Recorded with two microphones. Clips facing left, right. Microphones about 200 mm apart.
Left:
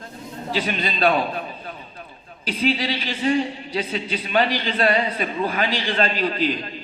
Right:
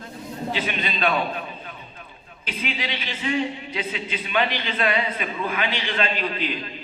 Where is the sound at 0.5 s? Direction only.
35° left (ahead or behind).